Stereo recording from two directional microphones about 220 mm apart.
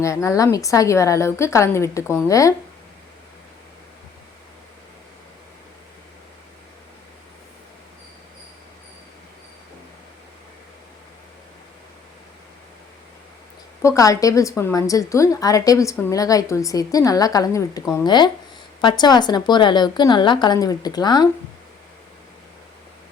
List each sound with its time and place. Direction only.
0.0 s a woman's voice: 15° left (ahead or behind)
13.8 s a woman's voice: 15° left (ahead or behind)